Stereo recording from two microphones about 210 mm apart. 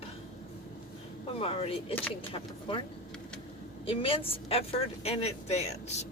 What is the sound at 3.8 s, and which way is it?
A woman's voice, 25° left (ahead or behind).